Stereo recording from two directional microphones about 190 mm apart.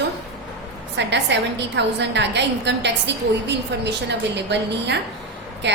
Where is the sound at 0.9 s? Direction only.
65° right (ahead or behind).